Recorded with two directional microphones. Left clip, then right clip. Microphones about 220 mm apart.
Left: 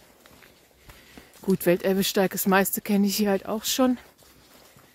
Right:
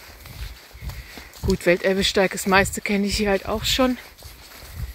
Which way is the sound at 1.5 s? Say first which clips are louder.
Right 4 dB; 30° left (ahead or behind).